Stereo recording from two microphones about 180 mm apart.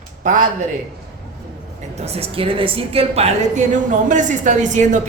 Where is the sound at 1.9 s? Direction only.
35° right (ahead or behind).